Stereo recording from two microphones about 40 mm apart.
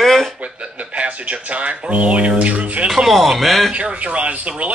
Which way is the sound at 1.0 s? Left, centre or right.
Right.